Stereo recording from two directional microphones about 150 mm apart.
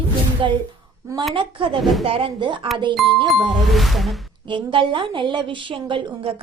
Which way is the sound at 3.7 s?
Centre (ahead or behind).